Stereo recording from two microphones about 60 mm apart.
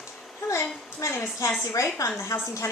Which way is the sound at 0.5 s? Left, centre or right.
Left.